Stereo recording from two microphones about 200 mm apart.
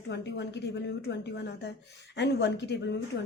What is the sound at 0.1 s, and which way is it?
Speech, 60° left (ahead or behind).